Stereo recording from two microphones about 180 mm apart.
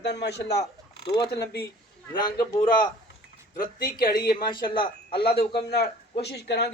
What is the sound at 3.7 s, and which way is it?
Speech, 55° left (ahead or behind).